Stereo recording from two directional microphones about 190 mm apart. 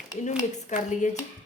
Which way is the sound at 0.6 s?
40° left (ahead or behind).